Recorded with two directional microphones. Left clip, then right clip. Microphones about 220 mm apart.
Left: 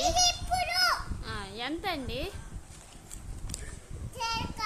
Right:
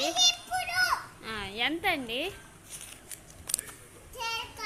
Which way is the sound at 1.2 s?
5° right (ahead or behind).